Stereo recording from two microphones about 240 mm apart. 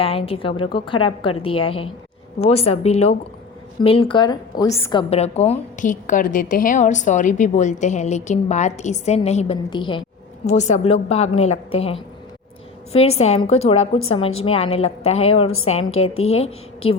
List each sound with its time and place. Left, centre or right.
0.0 s a woman's voice: left